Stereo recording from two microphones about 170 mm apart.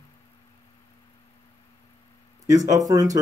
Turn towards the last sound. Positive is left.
turn(degrees=-20)  # may be behind; listen again after turning